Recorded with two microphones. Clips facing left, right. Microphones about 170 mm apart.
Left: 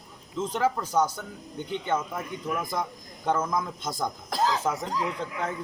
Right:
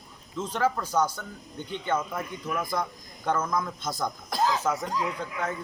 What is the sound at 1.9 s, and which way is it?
A man's voice, 10° left (ahead or behind).